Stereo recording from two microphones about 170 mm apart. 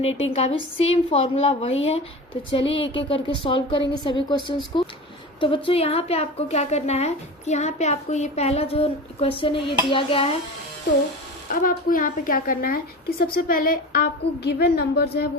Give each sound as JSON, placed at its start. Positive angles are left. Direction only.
{"t": 0.0, "sound": "a woman's voice", "side_deg": 35}
{"t": 11.6, "sound": "a woman's voice", "side_deg": 55}
{"t": 14.6, "sound": "a woman's voice", "side_deg": 70}